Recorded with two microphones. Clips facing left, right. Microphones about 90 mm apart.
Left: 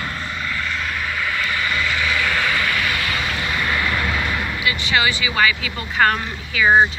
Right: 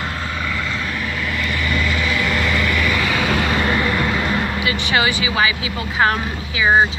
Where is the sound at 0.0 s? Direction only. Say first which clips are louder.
Right 2 dB; 35° right (ahead or behind).